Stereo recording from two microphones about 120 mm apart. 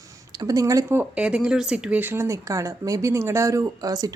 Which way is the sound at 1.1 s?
10° right (ahead or behind).